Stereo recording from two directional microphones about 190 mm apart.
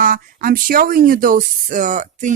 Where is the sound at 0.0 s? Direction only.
45° right (ahead or behind).